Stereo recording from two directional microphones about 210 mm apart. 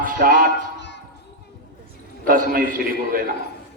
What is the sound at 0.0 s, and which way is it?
Music, 40° right (ahead or behind).